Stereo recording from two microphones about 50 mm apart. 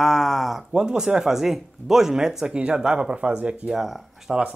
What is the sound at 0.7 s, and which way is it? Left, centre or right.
Speech, centre.